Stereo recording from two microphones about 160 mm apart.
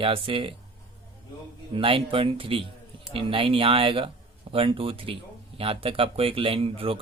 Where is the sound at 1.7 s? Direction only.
35° right (ahead or behind).